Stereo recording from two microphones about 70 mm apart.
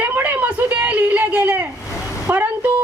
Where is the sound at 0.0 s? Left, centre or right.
Right.